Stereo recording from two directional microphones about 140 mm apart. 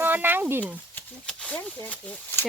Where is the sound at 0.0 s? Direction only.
15° right (ahead or behind).